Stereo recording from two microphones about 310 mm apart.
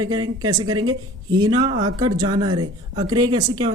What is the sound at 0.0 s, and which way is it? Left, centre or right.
Speech, centre.